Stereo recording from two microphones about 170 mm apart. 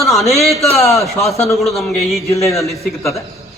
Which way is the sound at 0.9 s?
Centre (ahead or behind).